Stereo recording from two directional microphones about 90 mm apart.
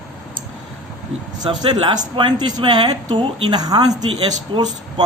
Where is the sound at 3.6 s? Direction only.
50° right (ahead or behind).